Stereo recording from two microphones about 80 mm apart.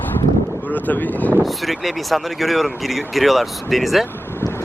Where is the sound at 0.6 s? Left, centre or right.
Left.